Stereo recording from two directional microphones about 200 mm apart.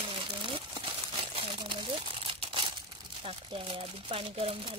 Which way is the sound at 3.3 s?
25° right (ahead or behind).